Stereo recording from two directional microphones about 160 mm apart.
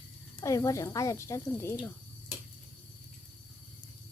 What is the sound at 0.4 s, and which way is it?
A woman's voice, 20° left (ahead or behind).